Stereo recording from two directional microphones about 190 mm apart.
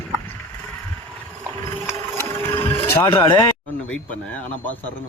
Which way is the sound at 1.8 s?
10° left (ahead or behind).